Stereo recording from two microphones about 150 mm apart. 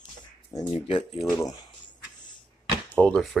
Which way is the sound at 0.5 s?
30° left (ahead or behind).